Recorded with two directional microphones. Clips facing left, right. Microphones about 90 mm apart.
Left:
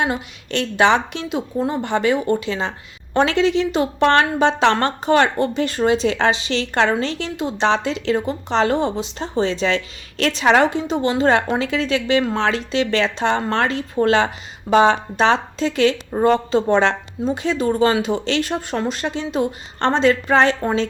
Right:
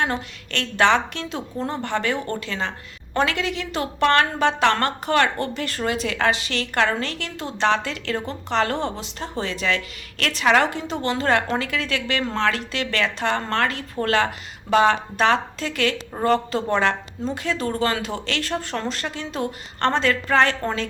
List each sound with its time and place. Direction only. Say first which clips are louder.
0.0 s a woman's voice: left 3 dB; 15° left (ahead or behind)